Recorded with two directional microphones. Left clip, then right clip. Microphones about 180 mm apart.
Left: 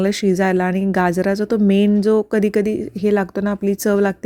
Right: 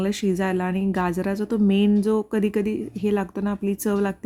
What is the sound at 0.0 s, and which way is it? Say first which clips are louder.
Speech: left 7 dB; 30° left (ahead or behind).